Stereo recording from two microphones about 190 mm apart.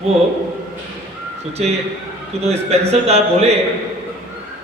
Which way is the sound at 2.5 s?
35° right (ahead or behind).